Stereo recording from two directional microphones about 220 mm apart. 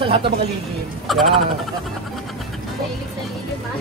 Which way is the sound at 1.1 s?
Centre (ahead or behind).